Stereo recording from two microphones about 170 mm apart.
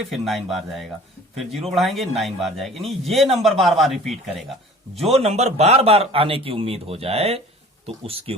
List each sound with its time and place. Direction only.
0.1 s a man's voice: centre (ahead or behind)
5.1 s a man's voice: 40° right (ahead or behind)